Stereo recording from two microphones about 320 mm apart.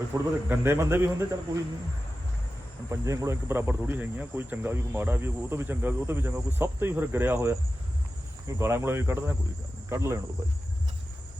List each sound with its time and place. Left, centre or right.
0.1 s speech: centre
2.9 s speech: centre